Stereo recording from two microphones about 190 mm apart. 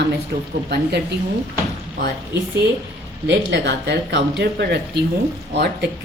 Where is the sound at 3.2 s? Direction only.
65° right (ahead or behind).